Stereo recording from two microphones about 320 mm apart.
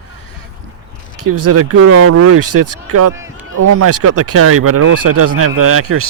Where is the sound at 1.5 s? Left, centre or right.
Right.